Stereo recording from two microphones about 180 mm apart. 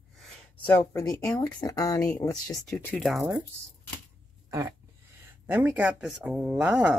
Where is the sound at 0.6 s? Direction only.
15° left (ahead or behind).